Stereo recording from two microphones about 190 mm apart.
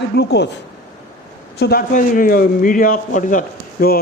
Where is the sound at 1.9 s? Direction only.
45° left (ahead or behind).